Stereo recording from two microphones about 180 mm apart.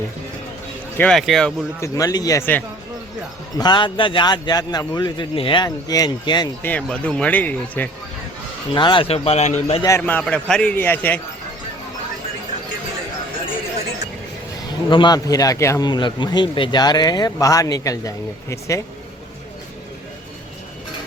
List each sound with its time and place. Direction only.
0.9 s speech: 5° left (ahead or behind)
1.8 s a man's voice: 15° left (ahead or behind)
3.6 s a man's voice: 25° left (ahead or behind)
6.6 s speech: 10° left (ahead or behind)
8.7 s a man's voice: 25° left (ahead or behind)
10.0 s speech: 10° left (ahead or behind)
14.8 s a man's voice: 25° left (ahead or behind)